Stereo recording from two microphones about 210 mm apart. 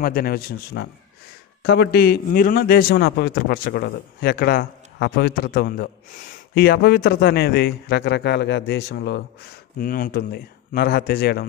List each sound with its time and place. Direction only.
0.0 s a man's voice: 45° left (ahead or behind)